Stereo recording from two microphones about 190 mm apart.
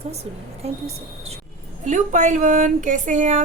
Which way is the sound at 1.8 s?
40° right (ahead or behind).